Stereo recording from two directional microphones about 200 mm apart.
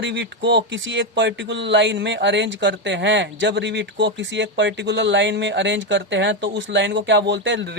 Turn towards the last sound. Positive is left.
turn(degrees=-65)  # may be behind; listen again after turning